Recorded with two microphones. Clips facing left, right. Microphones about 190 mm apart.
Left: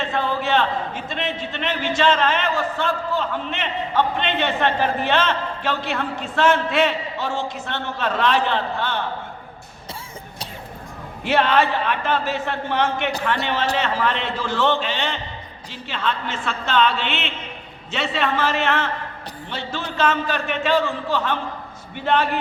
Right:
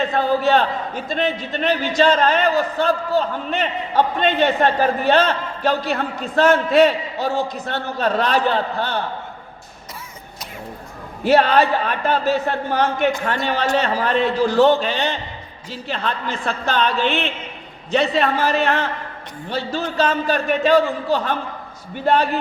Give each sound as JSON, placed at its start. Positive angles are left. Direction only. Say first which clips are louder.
{"t": 0.0, "sound": "a man's voice", "louder": "right 5 dB", "side_deg": -40}
{"t": 11.2, "sound": "a man's voice", "louder": "right 4 dB", "side_deg": -40}